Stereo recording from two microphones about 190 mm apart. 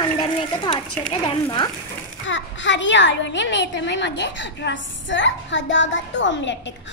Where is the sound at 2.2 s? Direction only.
75° left (ahead or behind).